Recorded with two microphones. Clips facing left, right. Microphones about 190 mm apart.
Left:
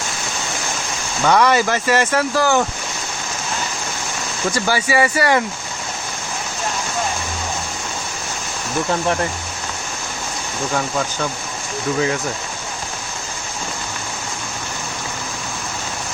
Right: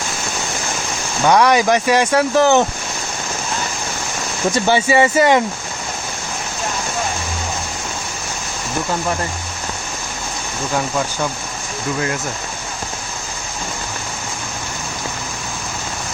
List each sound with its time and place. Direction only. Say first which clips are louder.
1.2 s speech: right 2 dB; 15° right (ahead or behind)
4.5 s speech: right 4 dB; 25° right (ahead or behind)